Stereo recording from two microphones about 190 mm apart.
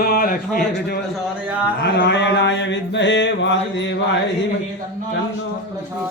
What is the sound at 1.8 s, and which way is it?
Mantra, 65° left (ahead or behind).